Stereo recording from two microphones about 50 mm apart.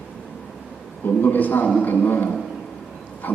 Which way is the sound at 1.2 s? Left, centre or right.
Left.